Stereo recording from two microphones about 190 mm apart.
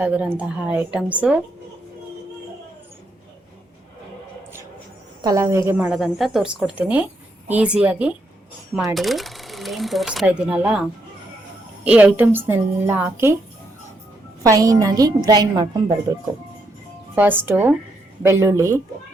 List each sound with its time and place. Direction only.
0.0 s a woman's voice: 10° right (ahead or behind)
5.2 s a woman's voice: 15° right (ahead or behind)
11.9 s a woman's voice: 5° right (ahead or behind)
14.4 s a woman's voice: 20° right (ahead or behind)
17.4 s a woman's voice: 10° right (ahead or behind)